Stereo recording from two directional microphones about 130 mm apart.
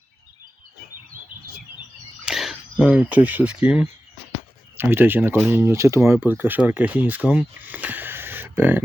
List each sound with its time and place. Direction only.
2.2 s speech: 5° right (ahead or behind)